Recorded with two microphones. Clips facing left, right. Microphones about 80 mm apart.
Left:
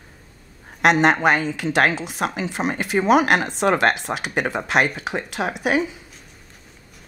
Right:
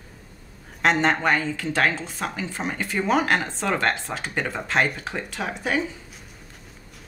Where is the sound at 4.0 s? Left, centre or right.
Left.